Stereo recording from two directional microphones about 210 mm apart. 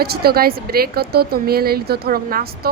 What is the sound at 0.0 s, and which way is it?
Speech, 50° right (ahead or behind).